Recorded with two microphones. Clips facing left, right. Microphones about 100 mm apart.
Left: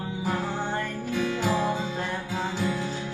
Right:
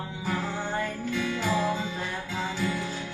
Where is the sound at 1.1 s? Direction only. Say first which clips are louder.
Left 2 dB; 15° left (ahead or behind).